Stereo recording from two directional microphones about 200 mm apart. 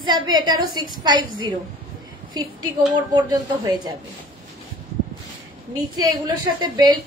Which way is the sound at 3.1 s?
20° right (ahead or behind).